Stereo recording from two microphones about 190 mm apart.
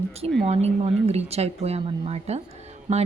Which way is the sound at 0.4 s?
35° right (ahead or behind).